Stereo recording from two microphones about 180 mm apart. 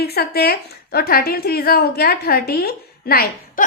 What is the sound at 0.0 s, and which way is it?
A woman's voice, 60° left (ahead or behind).